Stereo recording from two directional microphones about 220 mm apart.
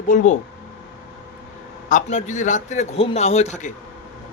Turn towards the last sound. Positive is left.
turn(degrees=30)  # may be behind; listen again after turning